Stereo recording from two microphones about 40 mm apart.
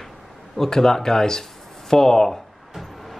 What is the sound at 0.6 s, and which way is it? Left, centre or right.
Speech, centre.